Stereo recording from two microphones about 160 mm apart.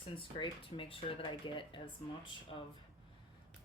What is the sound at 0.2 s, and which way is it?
Speech, 35° left (ahead or behind).